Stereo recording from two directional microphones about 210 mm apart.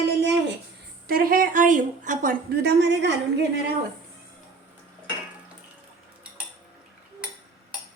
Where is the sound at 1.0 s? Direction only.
45° right (ahead or behind).